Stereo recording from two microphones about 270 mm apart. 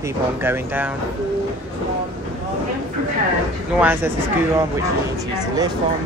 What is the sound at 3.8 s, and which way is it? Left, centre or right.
Speech, centre.